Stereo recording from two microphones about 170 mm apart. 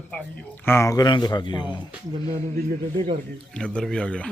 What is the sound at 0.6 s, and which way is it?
Speech, 15° left (ahead or behind).